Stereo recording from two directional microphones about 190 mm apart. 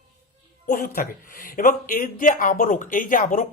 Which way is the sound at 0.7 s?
45° left (ahead or behind).